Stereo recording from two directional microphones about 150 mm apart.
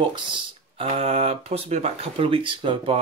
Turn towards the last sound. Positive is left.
turn(degrees=-35)  # may be behind; listen again after turning